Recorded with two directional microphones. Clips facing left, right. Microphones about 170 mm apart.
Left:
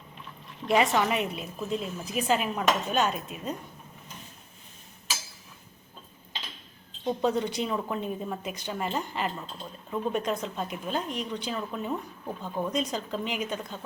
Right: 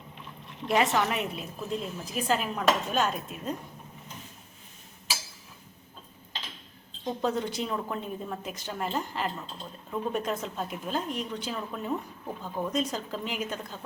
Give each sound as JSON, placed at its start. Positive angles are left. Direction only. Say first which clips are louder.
{"t": 0.7, "sound": "a woman's voice", "louder": "left 2 dB", "side_deg": 0}
{"t": 7.0, "sound": "a woman's voice", "louder": "left 3 dB", "side_deg": 0}